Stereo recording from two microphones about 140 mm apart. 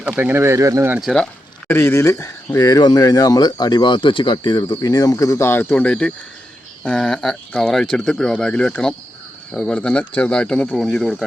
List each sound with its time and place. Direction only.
0.2 s speech: 15° right (ahead or behind)
1.0 s speech: 5° left (ahead or behind)
1.6 s speech: 15° left (ahead or behind)